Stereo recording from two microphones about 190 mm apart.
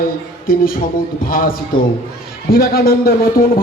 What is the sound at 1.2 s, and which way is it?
A man's voice, 50° left (ahead or behind).